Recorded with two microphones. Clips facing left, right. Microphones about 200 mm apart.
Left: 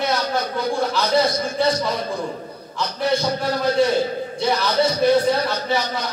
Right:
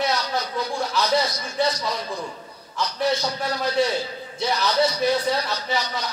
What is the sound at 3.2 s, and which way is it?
A man's voice, 55° left (ahead or behind).